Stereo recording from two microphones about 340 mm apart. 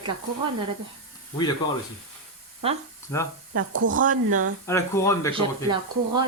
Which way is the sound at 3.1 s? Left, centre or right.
Centre.